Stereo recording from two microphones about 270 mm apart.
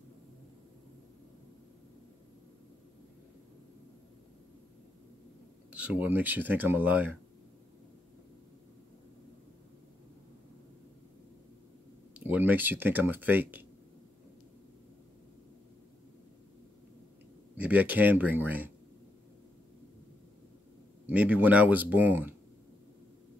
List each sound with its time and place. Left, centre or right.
5.7 s speech: centre
12.3 s speech: centre
17.6 s speech: centre
21.1 s speech: centre